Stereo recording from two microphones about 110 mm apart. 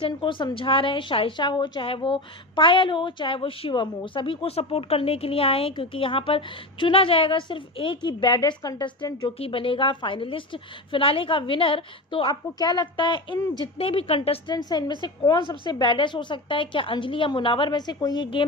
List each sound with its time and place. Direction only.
0.0 s a woman's voice: 50° left (ahead or behind)
9.4 s a woman's voice: 55° left (ahead or behind)
12.3 s a woman's voice: 35° left (ahead or behind); by 14.4 s 65° left (ahead or behind)
14.5 s a woman's voice: 40° left (ahead or behind)